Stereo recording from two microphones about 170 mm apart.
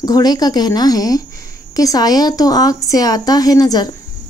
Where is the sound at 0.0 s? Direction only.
25° left (ahead or behind).